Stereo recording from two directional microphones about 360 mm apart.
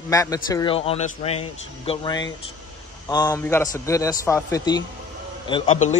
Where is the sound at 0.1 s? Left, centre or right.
Centre.